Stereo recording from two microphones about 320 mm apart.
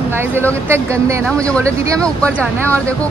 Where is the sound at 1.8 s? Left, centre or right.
Centre.